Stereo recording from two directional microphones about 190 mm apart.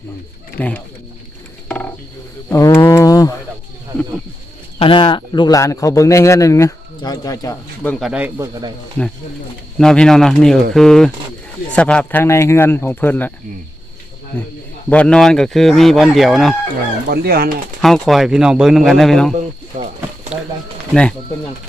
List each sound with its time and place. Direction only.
0.6 s a man's voice: 10° left (ahead or behind)
1.6 s a sound: 5° left (ahead or behind)
4.8 s a man's voice: 25° left (ahead or behind)
7.9 s speech: centre (ahead or behind)
9.7 s a man's voice: 5° left (ahead or behind)
14.3 s a man's voice: 10° left (ahead or behind)
17.1 s speech: 55° right (ahead or behind)
17.8 s speech: centre (ahead or behind)
19.4 s a sound: 35° right (ahead or behind)
20.3 s a sound: 5° right (ahead or behind)
20.9 s speech: 5° left (ahead or behind)